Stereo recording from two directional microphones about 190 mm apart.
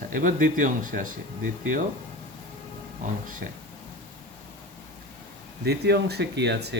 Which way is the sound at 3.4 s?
55° right (ahead or behind).